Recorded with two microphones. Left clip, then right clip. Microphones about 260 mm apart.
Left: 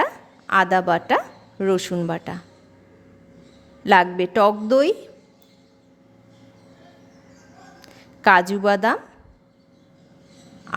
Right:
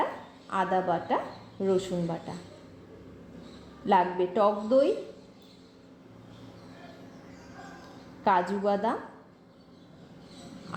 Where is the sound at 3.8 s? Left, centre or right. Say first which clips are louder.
Left 8 dB; left.